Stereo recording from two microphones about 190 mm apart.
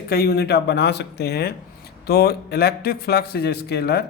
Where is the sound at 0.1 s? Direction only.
55° left (ahead or behind).